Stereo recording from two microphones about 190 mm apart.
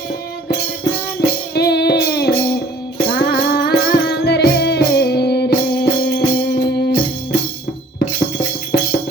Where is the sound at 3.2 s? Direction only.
55° left (ahead or behind).